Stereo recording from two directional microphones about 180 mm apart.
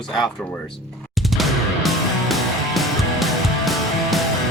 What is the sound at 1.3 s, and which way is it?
Music, centre (ahead or behind).